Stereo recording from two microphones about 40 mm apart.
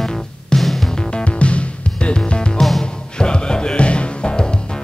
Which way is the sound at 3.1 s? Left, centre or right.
Left.